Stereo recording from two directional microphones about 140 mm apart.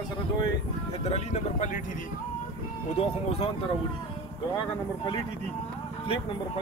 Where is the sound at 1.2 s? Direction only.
55° left (ahead or behind).